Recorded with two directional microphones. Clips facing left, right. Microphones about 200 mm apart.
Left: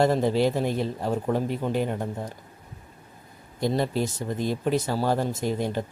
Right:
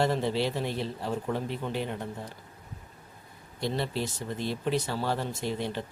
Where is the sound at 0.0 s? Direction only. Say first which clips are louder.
Left 6 dB; 45° left (ahead or behind).